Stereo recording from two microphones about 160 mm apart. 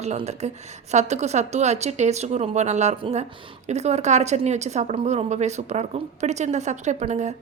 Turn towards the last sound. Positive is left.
turn(degrees=-45)  # may be behind; listen again after turning